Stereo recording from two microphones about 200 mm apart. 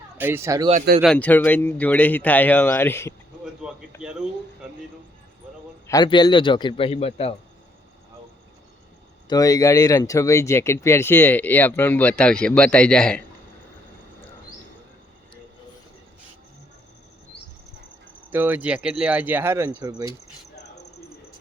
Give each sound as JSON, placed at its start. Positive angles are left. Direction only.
{"t": 0.2, "sound": "speech", "side_deg": -10}
{"t": 0.7, "sound": "speech", "side_deg": -40}
{"t": 1.0, "sound": "speech", "side_deg": 5}
{"t": 3.4, "sound": "a man's voice", "side_deg": -5}
{"t": 5.9, "sound": "a man's voice", "side_deg": 20}
{"t": 9.3, "sound": "speech", "side_deg": 15}
{"t": 18.3, "sound": "speech", "side_deg": -10}